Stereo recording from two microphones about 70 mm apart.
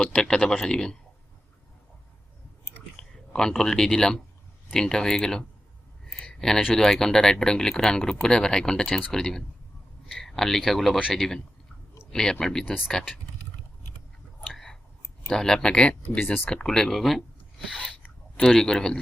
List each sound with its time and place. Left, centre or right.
0.1 s speech: centre
2.9 s a sound: centre
3.5 s speech: centre
6.2 s a sound: centre
6.7 s speech: centre
8.9 s speech: left
9.1 s speech: centre
12.6 s speech: centre
12.9 s speech: centre
14.4 s a sound: centre
15.3 s speech: centre
16.5 s speech: centre